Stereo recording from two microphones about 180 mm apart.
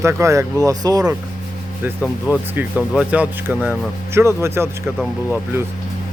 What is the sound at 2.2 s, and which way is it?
Speech, 10° right (ahead or behind).